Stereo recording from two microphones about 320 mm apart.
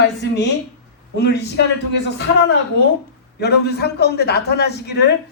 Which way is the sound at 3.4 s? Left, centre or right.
Left.